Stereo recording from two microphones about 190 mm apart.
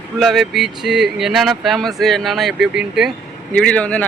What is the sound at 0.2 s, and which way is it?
Speech, centre (ahead or behind).